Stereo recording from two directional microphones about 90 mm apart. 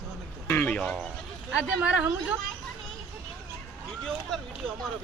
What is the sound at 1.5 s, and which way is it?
Speech, 10° right (ahead or behind).